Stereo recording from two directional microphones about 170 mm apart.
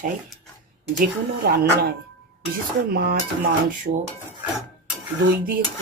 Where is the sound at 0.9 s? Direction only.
65° right (ahead or behind).